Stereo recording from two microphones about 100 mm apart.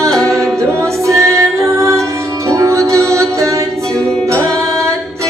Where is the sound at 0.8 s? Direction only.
30° right (ahead or behind).